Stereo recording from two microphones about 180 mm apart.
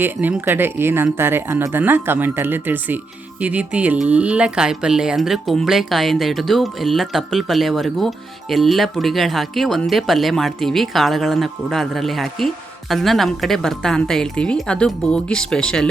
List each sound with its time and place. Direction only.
0.0 s speech: 10° right (ahead or behind)